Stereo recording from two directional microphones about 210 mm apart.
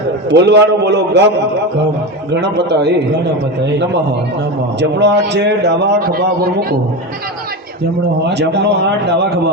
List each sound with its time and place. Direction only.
0.3 s a man's voice: 55° right (ahead or behind)
2.3 s a man's voice: 55° right (ahead or behind)
4.8 s a man's voice: 55° right (ahead or behind)
8.3 s a man's voice: 55° right (ahead or behind)